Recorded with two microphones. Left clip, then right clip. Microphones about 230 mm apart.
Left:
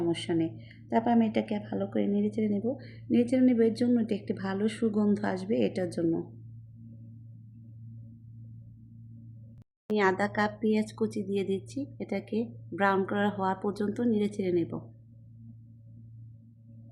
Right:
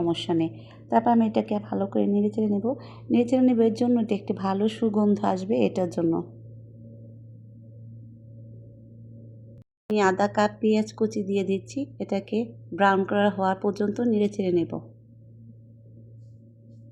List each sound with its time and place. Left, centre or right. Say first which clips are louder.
0.1 s speech: right 4 dB; centre
0.5 s a woman's voice: right 8 dB; centre
1.0 s speech: right 5 dB; centre
9.9 s speech: right 5 dB; centre